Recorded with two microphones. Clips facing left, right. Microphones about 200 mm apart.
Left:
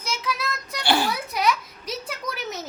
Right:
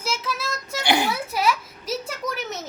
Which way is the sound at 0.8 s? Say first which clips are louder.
Right 1 dB; 20° right (ahead or behind).